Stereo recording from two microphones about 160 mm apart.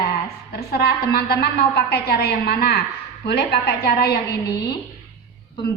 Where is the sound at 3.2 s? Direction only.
90° left.